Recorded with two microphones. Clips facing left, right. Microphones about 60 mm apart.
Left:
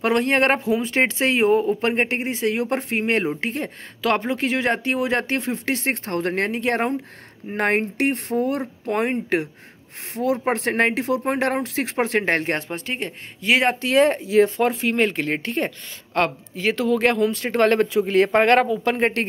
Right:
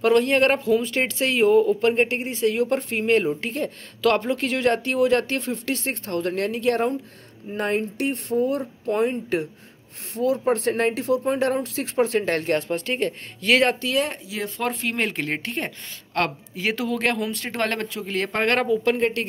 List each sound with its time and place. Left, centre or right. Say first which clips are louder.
0.0 s speech: right 1 dB; left
5.9 s speech: left 2 dB; left
7.5 s speech: left 3 dB; left
12.3 s speech: even; left
12.6 s speech: right 4 dB; centre
13.8 s speech: left 7 dB; left
14.8 s a woman's voice: left 5 dB; centre
18.9 s speech: left 2 dB; left